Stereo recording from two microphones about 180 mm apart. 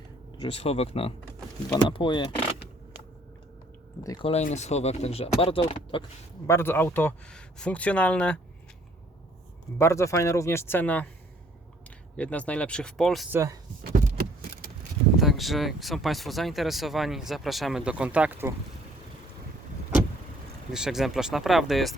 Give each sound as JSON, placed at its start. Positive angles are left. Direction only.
{"t": 0.3, "sound": "speech", "side_deg": 35}
{"t": 4.0, "sound": "speech", "side_deg": 20}
{"t": 4.3, "sound": "speech", "side_deg": 40}
{"t": 6.5, "sound": "speech", "side_deg": 15}
{"t": 9.7, "sound": "speech", "side_deg": 15}
{"t": 12.1, "sound": "speech", "side_deg": 10}
{"t": 13.3, "sound": "speech", "side_deg": -15}
{"t": 15.2, "sound": "speech", "side_deg": 0}
{"t": 20.7, "sound": "speech", "side_deg": -5}